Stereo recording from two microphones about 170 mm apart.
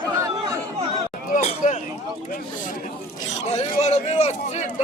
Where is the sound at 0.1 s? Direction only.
20° right (ahead or behind).